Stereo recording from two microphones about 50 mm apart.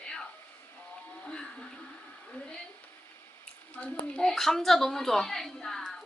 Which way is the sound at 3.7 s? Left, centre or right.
Left.